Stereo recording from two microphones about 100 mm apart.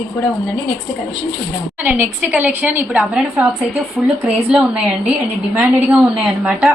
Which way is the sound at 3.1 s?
10° right (ahead or behind).